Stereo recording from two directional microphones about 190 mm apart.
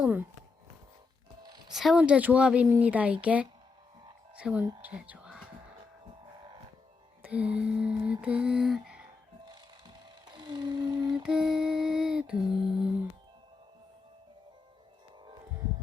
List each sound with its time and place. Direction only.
0.0 s speech: 10° right (ahead or behind)
1.7 s speech: centre (ahead or behind)
7.2 s mantra: 5° right (ahead or behind)
9.5 s a sound: 25° right (ahead or behind)
11.1 s mantra: 5° right (ahead or behind)
12.5 s mantra: 30° right (ahead or behind)